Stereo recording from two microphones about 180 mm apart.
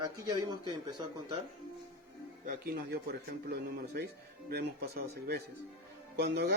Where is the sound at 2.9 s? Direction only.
65° right (ahead or behind).